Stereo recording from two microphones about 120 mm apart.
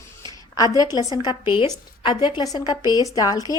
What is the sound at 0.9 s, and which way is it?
A woman's voice, 35° left (ahead or behind).